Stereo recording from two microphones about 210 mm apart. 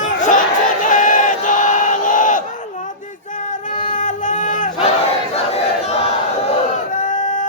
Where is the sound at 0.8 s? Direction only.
40° left (ahead or behind).